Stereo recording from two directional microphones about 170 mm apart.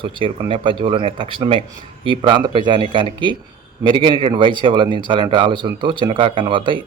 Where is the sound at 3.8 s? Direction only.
30° right (ahead or behind).